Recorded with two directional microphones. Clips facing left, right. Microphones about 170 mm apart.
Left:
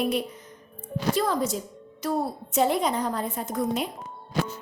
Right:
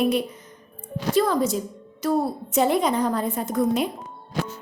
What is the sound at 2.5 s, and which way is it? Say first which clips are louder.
A woman's voice: right 3 dB; 65° right (ahead or behind).